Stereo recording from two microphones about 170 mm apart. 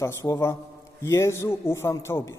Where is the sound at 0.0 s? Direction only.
15° left (ahead or behind).